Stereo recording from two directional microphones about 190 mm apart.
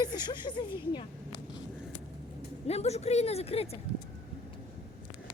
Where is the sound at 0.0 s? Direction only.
20° left (ahead or behind).